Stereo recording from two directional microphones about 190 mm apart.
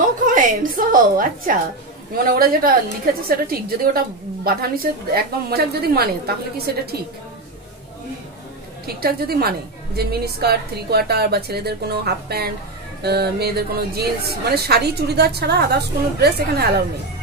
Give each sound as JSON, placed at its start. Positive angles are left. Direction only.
{"t": 0.3, "sound": "a woman's voice", "side_deg": -45}
{"t": 8.8, "sound": "a woman's voice", "side_deg": -55}